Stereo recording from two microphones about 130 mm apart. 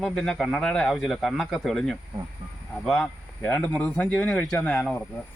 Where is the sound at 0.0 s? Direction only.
5° left (ahead or behind).